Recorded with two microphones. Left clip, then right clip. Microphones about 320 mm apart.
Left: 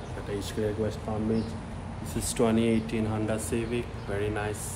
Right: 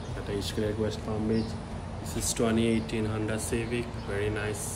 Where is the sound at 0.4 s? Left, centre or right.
Centre.